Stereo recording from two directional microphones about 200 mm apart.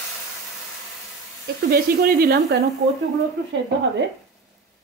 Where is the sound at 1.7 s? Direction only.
50° right (ahead or behind).